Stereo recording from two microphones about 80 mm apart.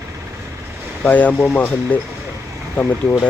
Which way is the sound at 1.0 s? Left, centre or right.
Centre.